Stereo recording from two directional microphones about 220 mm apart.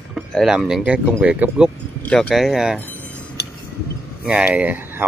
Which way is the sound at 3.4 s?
45° left (ahead or behind).